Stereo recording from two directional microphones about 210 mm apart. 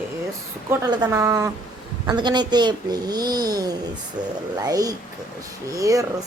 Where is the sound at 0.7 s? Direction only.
15° right (ahead or behind).